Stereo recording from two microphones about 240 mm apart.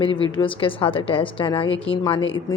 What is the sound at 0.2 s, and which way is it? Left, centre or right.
A woman's voice, left.